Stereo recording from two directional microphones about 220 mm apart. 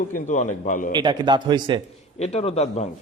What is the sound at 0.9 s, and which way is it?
Speech, 20° right (ahead or behind).